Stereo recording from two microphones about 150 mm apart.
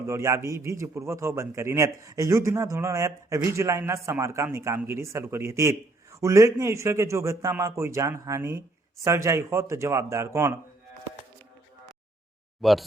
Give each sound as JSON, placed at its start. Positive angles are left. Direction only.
{"t": 0.1, "sound": "a man's voice", "side_deg": -20}
{"t": 12.6, "sound": "speech", "side_deg": 0}